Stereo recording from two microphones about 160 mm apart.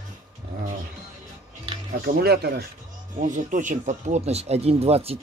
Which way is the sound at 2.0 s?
75° right (ahead or behind).